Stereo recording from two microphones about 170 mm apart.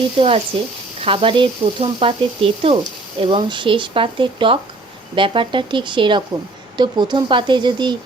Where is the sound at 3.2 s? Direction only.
30° right (ahead or behind).